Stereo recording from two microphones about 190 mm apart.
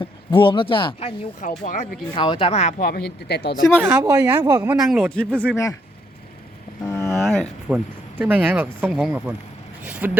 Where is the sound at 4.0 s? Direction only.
15° right (ahead or behind).